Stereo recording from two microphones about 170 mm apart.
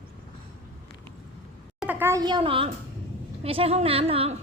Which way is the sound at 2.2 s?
30° right (ahead or behind).